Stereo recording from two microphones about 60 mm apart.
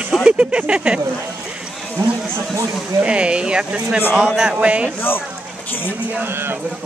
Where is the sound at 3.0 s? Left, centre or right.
Centre.